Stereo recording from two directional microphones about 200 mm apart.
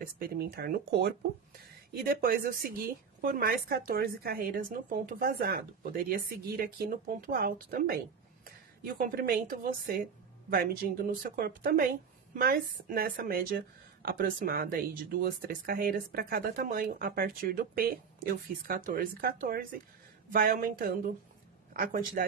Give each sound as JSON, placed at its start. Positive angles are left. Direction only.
{"t": 0.0, "sound": "a woman's voice", "side_deg": -50}